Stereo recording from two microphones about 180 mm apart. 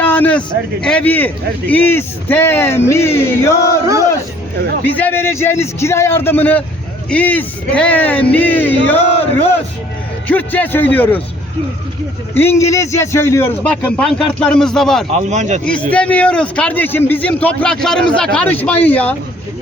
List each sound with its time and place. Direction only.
0.0 s speech: 10° left (ahead or behind)
3.7 s speech: 15° right (ahead or behind)
4.9 s speech: 10° left (ahead or behind)
10.2 s speech: 10° left (ahead or behind)
12.3 s speech: 10° left (ahead or behind)
15.1 s speech: 40° right (ahead or behind)
15.9 s speech: 10° left (ahead or behind)